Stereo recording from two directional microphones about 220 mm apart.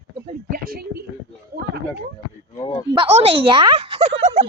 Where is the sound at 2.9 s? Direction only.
25° right (ahead or behind).